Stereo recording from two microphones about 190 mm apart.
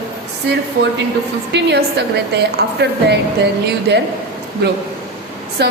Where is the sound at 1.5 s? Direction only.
65° right (ahead or behind).